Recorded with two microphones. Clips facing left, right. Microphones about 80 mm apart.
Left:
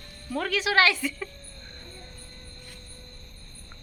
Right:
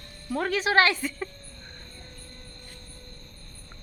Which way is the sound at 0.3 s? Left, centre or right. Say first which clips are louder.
Right 1 dB; right.